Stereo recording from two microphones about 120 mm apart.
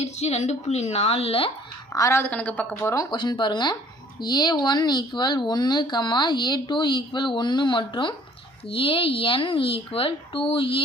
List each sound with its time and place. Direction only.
0.0 s a woman's voice: 65° left (ahead or behind)
1.9 s a woman's voice: 25° left (ahead or behind)
2.9 s a woman's voice: 30° left (ahead or behind)
3.2 s speech: 40° left (ahead or behind)